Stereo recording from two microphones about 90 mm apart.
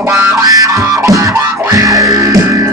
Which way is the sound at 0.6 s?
40° right (ahead or behind).